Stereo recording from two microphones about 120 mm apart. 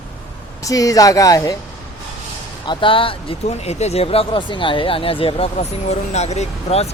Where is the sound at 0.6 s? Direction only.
30° left (ahead or behind).